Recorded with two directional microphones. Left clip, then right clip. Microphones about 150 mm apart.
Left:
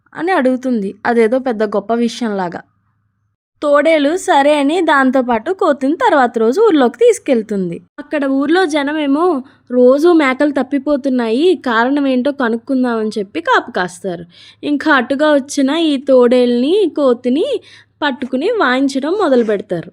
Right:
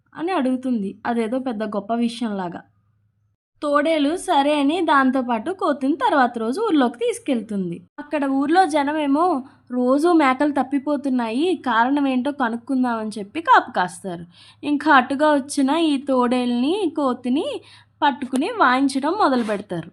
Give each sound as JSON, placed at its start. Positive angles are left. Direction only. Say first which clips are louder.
{"t": 0.1, "sound": "a woman's voice", "louder": "left 8 dB", "side_deg": 30}